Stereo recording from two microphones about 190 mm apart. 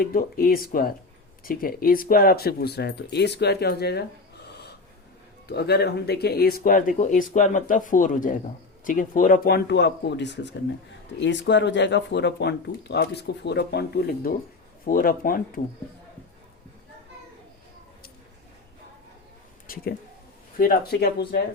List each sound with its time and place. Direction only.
0.0 s speech: 50° left (ahead or behind)
5.5 s speech: 60° left (ahead or behind)
14.8 s speech: 50° left (ahead or behind)
19.6 s a sound: 50° left (ahead or behind)
20.6 s speech: 50° left (ahead or behind)